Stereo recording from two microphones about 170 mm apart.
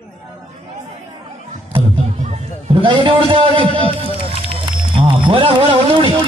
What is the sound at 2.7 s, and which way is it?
A man's voice, 30° right (ahead or behind).